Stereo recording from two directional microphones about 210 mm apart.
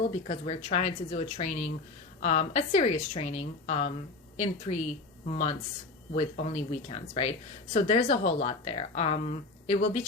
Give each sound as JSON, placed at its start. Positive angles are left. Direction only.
{"t": 0.3, "sound": "speech", "side_deg": 30}